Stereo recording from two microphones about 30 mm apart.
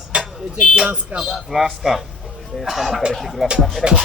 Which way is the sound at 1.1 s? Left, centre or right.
Right.